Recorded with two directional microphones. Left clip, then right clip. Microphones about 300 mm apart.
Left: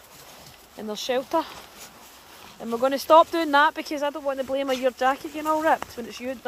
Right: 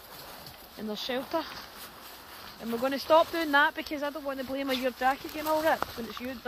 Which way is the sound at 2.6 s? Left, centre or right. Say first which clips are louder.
Left 7 dB; left.